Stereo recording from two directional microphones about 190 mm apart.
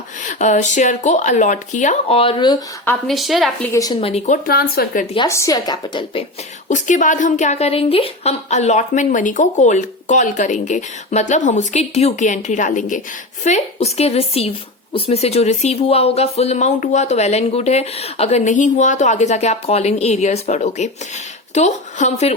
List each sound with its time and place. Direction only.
0.3 s speech: 40° left (ahead or behind)
3.1 s a woman's voice: centre (ahead or behind)
3.7 s a woman's voice: 20° left (ahead or behind)
4.0 s speech: 35° left (ahead or behind)
4.4 s speech: 55° left (ahead or behind)
5.1 s a woman's voice: 20° left (ahead or behind)
6.7 s speech: 40° left (ahead or behind)